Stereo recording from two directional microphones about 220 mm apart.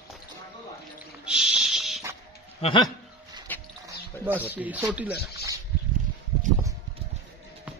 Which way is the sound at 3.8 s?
10° right (ahead or behind).